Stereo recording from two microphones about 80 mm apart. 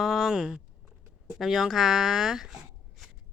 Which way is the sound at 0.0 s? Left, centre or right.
Centre.